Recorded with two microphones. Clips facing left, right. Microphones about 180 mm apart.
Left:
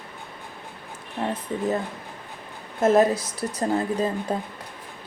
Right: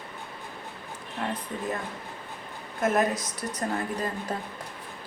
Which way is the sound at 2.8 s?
30° left (ahead or behind).